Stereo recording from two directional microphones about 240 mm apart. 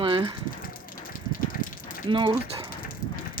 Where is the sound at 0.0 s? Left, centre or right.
Centre.